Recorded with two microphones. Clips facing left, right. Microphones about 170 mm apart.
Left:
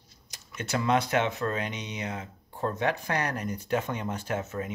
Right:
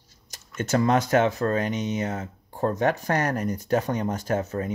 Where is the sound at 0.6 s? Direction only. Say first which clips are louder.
Right 5 dB; 40° right (ahead or behind).